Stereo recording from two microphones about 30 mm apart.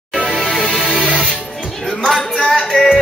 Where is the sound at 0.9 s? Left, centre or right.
Left.